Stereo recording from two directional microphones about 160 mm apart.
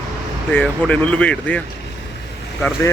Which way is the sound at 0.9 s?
10° left (ahead or behind).